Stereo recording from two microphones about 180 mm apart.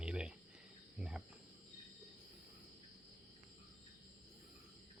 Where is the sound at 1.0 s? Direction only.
5° right (ahead or behind).